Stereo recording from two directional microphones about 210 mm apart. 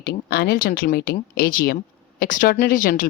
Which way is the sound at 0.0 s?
45° left (ahead or behind).